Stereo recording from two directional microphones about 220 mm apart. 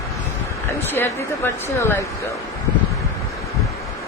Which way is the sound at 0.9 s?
10° left (ahead or behind).